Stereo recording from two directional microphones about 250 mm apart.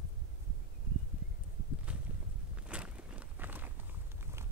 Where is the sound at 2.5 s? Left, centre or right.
Centre.